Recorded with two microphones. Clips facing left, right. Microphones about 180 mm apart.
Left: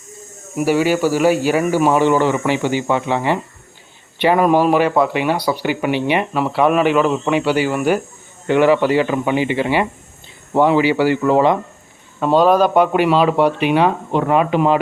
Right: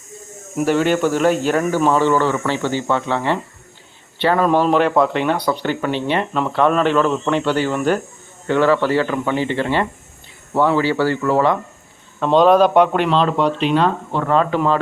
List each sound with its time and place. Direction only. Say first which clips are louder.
0.5 s speech: left 1 dB; 10° left (ahead or behind)
12.2 s speech: right 1 dB; 5° left (ahead or behind)